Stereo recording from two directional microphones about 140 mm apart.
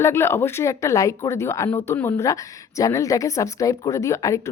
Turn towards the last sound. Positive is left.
turn(degrees=20)  # may be behind; listen again after turning